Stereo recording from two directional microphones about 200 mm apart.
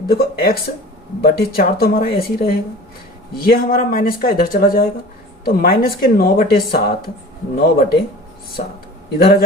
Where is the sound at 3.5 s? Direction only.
45° left (ahead or behind).